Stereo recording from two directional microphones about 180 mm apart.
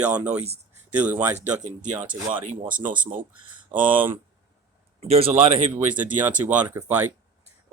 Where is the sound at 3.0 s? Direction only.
45° right (ahead or behind).